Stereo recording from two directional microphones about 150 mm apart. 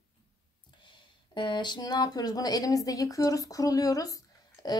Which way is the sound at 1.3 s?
30° left (ahead or behind).